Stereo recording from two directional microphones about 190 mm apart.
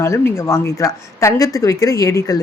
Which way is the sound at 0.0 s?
15° left (ahead or behind).